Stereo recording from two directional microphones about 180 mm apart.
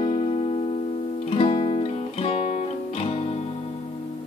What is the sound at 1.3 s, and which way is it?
Music, 30° left (ahead or behind).